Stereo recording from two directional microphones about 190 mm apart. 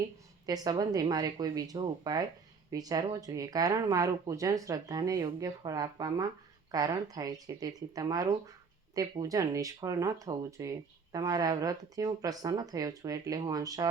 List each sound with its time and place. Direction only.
0.4 s speech: 20° right (ahead or behind)